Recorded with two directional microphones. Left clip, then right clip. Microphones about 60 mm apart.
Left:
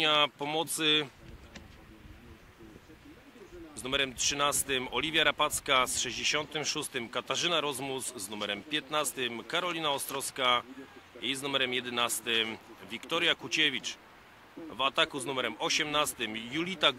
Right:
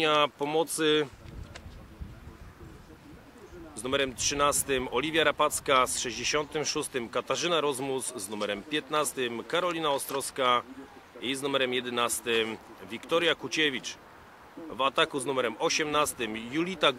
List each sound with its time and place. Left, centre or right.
0.0 s speech: left
3.7 s speech: left